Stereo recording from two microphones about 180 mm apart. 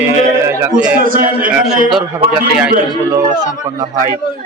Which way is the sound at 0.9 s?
50° right (ahead or behind).